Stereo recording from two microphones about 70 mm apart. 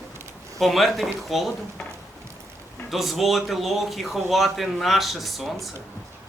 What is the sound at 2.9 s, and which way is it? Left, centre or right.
A man's voice, centre.